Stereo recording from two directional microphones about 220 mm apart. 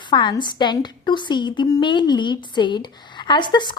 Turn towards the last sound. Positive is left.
turn(degrees=20)  # may be behind; listen again after turning